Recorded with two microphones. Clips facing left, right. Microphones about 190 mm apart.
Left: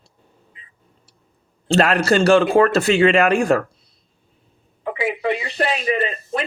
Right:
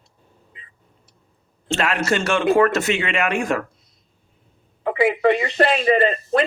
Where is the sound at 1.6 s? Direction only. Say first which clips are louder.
Left 5 dB; 35° left (ahead or behind).